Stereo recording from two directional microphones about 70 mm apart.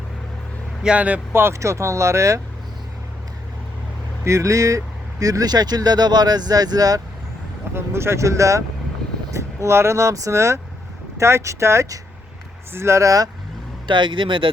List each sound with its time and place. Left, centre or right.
0.8 s speech: centre
1.3 s speech: right
1.5 s speech: right
4.2 s speech: right
7.7 s speech: right